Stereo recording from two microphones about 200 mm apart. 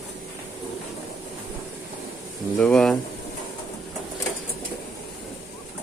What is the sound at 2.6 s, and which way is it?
Speech, 5° left (ahead or behind).